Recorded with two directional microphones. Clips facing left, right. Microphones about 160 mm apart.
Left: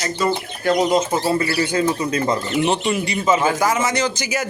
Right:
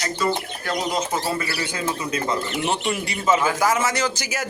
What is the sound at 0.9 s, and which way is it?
Speech, 30° left (ahead or behind).